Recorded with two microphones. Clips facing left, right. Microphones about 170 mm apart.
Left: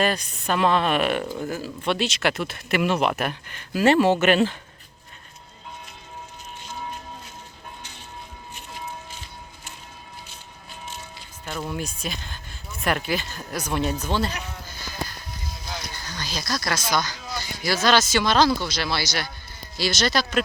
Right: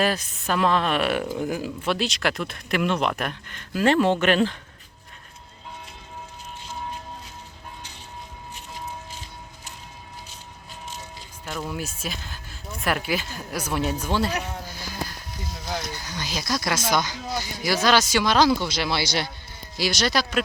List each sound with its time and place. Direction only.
0.0 s speech: 5° right (ahead or behind)
1.5 s speech: 15° right (ahead or behind)
1.9 s speech: centre (ahead or behind)
6.6 s music: 30° right (ahead or behind)
8.5 s a sound: 40° right (ahead or behind)
11.4 s speech: centre (ahead or behind)
16.0 s speech: 15° right (ahead or behind)
19.7 s speech: 15° right (ahead or behind)